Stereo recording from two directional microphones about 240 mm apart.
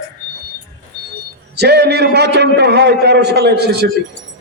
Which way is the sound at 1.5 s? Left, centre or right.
Right.